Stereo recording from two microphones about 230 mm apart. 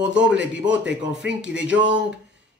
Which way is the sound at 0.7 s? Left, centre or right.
Centre.